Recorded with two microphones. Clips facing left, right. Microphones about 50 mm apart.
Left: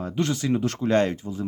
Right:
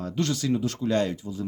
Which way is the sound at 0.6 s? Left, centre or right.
Left.